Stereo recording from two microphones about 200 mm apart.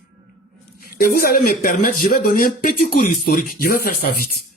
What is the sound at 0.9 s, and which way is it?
Speech, 50° left (ahead or behind).